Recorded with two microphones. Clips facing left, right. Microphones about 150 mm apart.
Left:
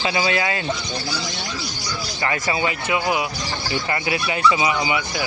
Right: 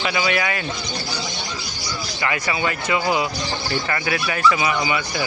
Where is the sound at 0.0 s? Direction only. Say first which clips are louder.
Left 1 dB; 30° left (ahead or behind).